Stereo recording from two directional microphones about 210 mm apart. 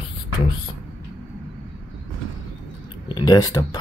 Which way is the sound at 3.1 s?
20° left (ahead or behind).